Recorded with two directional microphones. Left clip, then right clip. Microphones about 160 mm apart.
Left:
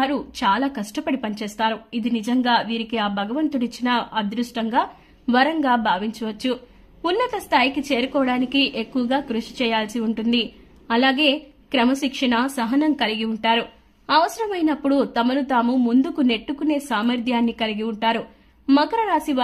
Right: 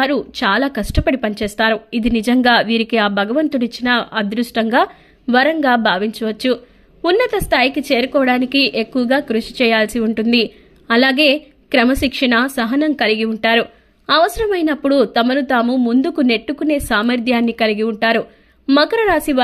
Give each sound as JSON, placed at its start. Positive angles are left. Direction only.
{"t": 0.0, "sound": "speech", "side_deg": -25}
{"t": 5.3, "sound": "speech", "side_deg": -20}